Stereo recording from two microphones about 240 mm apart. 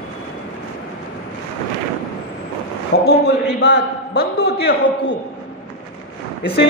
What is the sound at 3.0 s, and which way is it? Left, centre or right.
Speech, left.